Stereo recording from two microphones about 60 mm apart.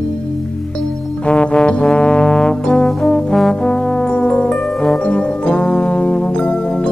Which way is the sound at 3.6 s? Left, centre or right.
Centre.